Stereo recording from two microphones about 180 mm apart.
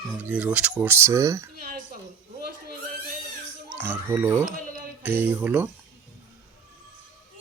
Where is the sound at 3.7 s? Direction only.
10° right (ahead or behind).